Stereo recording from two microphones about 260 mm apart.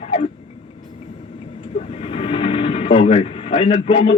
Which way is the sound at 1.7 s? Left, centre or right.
Left.